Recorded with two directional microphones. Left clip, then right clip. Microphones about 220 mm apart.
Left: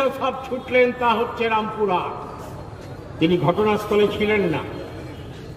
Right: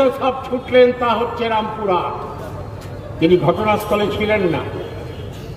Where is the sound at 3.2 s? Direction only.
55° left (ahead or behind).